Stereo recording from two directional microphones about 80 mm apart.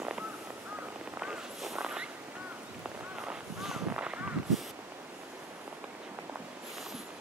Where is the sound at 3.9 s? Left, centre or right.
Centre.